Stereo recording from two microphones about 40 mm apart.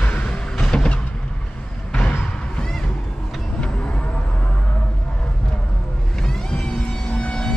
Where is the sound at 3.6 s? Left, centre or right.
Left.